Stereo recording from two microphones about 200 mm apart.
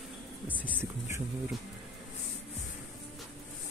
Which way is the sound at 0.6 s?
10° right (ahead or behind).